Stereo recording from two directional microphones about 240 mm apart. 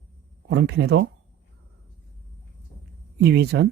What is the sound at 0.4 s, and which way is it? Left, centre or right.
Speech, right.